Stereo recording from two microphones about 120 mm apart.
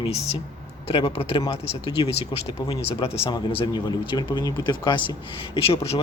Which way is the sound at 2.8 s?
55° left (ahead or behind).